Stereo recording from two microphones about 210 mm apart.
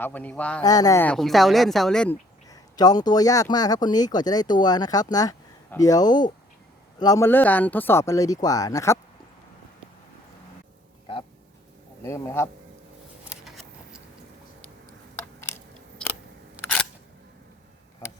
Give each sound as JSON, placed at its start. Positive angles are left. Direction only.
{"t": 0.0, "sound": "speech", "side_deg": 5}
{"t": 0.6, "sound": "a woman's voice", "side_deg": 15}
{"t": 2.5, "sound": "speech", "side_deg": 20}
{"t": 12.0, "sound": "speech", "side_deg": 15}
{"t": 13.3, "sound": "a sound", "side_deg": 0}